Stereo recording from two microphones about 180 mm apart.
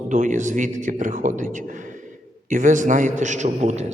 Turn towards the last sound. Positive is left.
turn(degrees=-40)  # may be behind; listen again after turning